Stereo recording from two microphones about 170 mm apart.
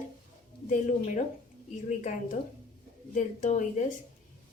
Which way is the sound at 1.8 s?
45° left (ahead or behind).